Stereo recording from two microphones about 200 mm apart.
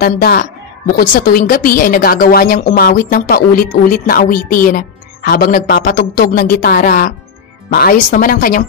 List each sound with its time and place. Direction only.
0.0 s a woman's voice: 50° left (ahead or behind)